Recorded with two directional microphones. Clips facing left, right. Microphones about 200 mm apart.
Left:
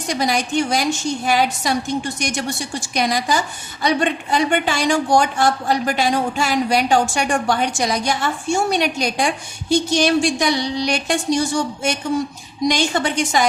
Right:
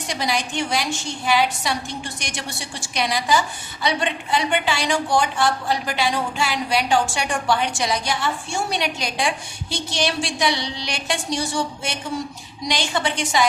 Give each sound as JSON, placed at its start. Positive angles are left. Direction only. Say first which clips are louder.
{"t": 0.1, "sound": "a woman's voice", "louder": "left 5 dB", "side_deg": 45}